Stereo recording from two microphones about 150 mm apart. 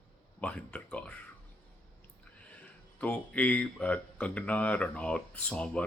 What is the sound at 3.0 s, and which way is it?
Speech, 10° left (ahead or behind).